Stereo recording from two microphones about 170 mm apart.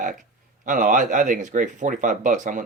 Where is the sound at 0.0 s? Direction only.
50° right (ahead or behind).